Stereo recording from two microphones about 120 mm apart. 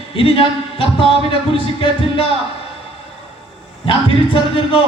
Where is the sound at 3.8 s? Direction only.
50° left (ahead or behind).